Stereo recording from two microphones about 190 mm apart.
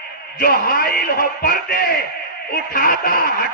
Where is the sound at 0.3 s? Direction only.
55° left (ahead or behind).